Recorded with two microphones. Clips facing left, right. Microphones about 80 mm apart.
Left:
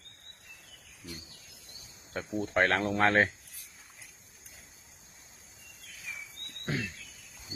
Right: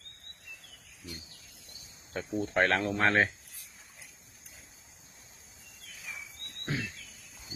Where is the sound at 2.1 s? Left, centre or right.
Left.